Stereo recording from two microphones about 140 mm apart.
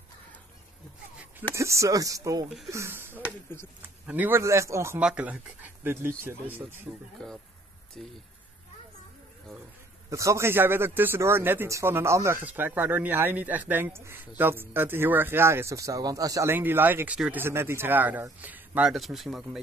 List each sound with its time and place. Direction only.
1.5 s speech: 20° right (ahead or behind)
5.0 s a man's voice: 10° right (ahead or behind)
7.2 s speech: 5° left (ahead or behind)
10.0 s a man's voice: 20° right (ahead or behind); by 19.6 s centre (ahead or behind)